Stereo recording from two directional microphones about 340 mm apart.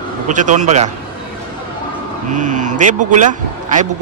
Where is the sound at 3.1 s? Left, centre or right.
Right.